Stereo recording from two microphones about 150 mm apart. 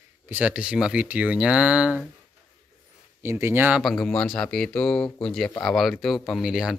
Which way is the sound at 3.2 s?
15° right (ahead or behind).